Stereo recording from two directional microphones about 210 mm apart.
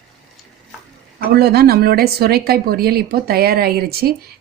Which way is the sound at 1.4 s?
50° right (ahead or behind).